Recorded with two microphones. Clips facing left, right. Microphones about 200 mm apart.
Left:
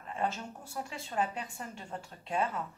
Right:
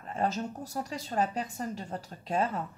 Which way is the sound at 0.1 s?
40° right (ahead or behind).